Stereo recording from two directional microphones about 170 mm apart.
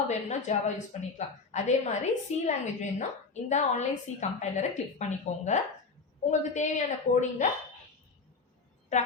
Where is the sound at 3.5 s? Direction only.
45° left (ahead or behind).